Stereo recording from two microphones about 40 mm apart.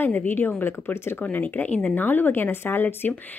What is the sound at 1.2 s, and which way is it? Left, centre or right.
A woman's voice, left.